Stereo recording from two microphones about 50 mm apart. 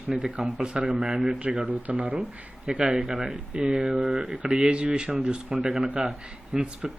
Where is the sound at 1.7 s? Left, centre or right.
Right.